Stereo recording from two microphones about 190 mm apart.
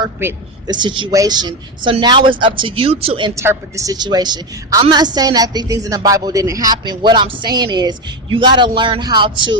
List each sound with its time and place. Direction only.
0.2 s a woman's voice: 10° right (ahead or behind)
0.8 s a woman's voice: 25° right (ahead or behind)
3.4 s a woman's voice: 15° right (ahead or behind)